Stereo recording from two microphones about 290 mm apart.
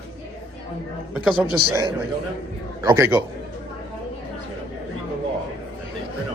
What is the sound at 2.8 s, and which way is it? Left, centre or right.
Speech, centre.